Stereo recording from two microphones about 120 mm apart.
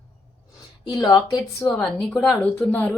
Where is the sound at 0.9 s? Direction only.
30° left (ahead or behind).